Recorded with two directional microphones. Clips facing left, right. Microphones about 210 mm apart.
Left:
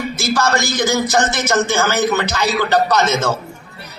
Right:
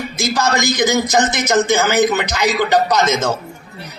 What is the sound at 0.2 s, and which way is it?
A man's voice, 20° right (ahead or behind).